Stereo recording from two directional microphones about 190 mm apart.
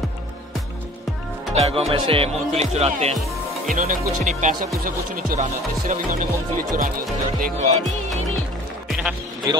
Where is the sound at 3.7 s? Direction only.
45° right (ahead or behind).